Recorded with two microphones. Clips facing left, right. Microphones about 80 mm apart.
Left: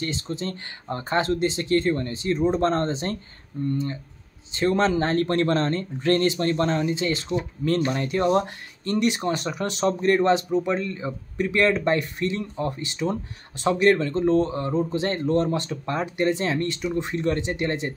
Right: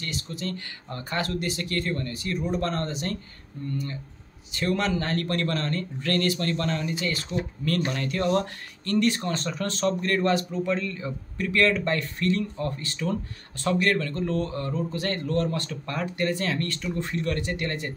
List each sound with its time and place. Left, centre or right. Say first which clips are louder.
0.0 s speech: left 4 dB; left